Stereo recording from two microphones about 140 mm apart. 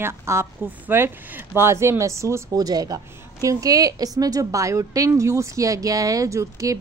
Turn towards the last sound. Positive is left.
turn(degrees=-20)  # may be behind; listen again after turning